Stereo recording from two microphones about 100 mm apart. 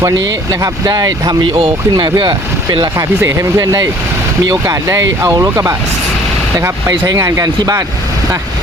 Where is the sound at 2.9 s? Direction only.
30° right (ahead or behind).